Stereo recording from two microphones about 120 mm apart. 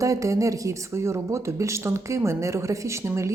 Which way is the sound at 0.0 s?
25° right (ahead or behind).